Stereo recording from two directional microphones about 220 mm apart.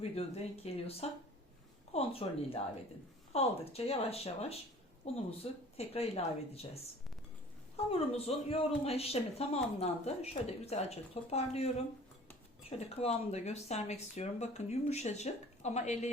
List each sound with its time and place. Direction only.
0.0 s speech: 25° left (ahead or behind)
7.9 s speech: 25° left (ahead or behind)